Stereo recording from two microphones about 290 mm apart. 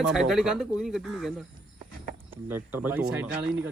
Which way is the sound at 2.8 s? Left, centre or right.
Centre.